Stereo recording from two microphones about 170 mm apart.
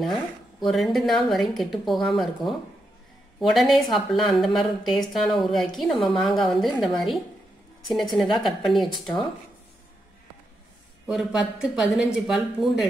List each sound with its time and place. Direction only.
0.0 s speech: centre (ahead or behind)
8.2 s speech: centre (ahead or behind)
11.1 s speech: 5° right (ahead or behind)